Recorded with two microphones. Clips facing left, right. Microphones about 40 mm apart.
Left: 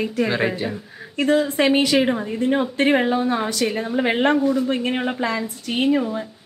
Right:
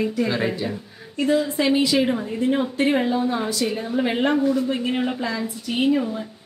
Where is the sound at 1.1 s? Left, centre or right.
Left.